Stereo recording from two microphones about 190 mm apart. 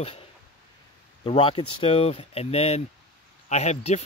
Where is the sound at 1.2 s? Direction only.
25° left (ahead or behind).